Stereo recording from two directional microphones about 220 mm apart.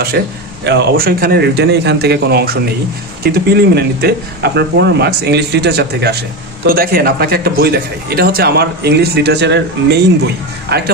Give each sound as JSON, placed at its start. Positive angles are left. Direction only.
{"t": 0.2, "sound": "a man's voice", "side_deg": -50}